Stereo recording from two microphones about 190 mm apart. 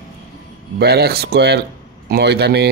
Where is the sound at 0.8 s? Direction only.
55° right (ahead or behind).